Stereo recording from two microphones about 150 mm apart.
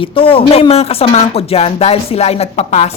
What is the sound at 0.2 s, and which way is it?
A woman's voice, 35° left (ahead or behind).